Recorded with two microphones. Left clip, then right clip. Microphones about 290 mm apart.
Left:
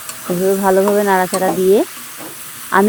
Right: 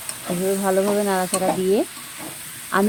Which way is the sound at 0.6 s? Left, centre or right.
Centre.